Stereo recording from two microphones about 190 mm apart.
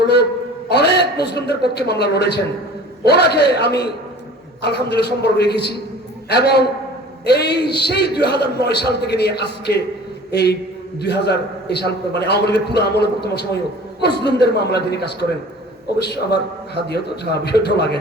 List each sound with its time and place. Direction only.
0.7 s a man's voice: 60° left (ahead or behind)